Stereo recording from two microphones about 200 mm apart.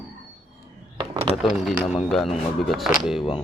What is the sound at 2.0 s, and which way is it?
Speech, centre (ahead or behind).